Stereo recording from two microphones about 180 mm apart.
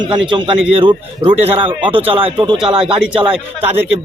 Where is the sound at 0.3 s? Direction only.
25° right (ahead or behind).